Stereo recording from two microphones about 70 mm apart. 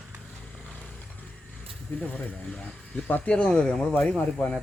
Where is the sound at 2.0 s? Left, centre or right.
Centre.